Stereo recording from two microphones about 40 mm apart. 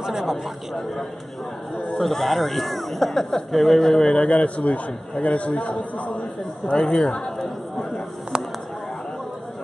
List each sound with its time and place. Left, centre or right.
0.0 s a sound: centre
2.0 s speech: centre; by 6.0 s left
6.7 s speech: left